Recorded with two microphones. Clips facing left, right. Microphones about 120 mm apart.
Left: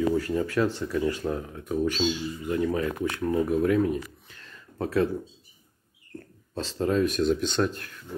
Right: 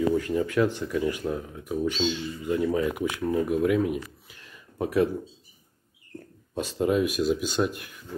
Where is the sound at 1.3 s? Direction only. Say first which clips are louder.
Left 1 dB; 5° right (ahead or behind).